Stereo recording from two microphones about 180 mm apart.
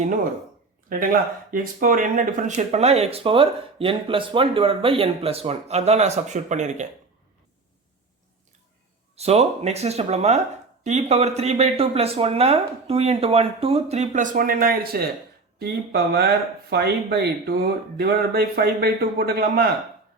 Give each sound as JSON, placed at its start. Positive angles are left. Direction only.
{"t": 0.9, "sound": "speech", "side_deg": -50}
{"t": 9.1, "sound": "speech", "side_deg": -35}